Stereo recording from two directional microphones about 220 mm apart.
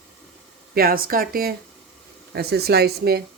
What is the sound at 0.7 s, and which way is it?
Speech, 40° right (ahead or behind).